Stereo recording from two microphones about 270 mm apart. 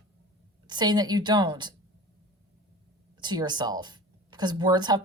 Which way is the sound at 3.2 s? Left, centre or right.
Centre.